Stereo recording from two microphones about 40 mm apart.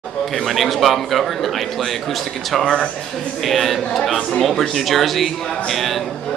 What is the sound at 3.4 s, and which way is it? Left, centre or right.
Speech, centre.